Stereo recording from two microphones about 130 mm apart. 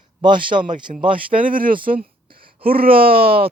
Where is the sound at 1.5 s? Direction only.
90° right.